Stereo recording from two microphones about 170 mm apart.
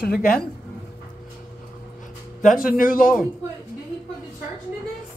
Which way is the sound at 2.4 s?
55° left (ahead or behind).